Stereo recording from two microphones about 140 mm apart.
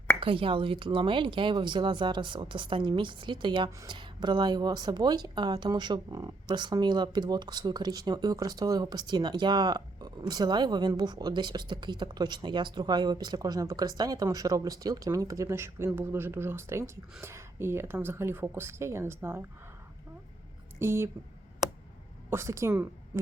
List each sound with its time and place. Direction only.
0.2 s speech: 40° right (ahead or behind); by 19.5 s 15° right (ahead or behind)
20.7 s speech: 15° right (ahead or behind)
22.3 s a woman's voice: 20° right (ahead or behind)